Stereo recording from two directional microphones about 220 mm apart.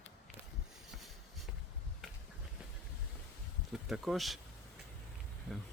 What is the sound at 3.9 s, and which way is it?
Speech, centre (ahead or behind).